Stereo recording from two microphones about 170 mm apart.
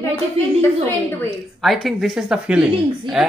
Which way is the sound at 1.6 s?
Centre (ahead or behind).